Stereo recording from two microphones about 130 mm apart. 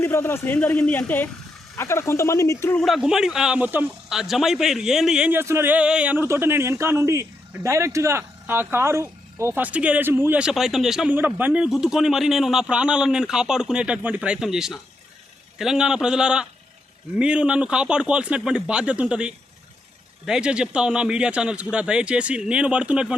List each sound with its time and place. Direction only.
0.0 s a man's voice: 20° left (ahead or behind)
2.7 s speech: centre (ahead or behind)
4.1 s speech: centre (ahead or behind)
5.3 s a man's voice: 20° right (ahead or behind); by 11.1 s centre (ahead or behind)
11.1 s a man's voice: 15° right (ahead or behind)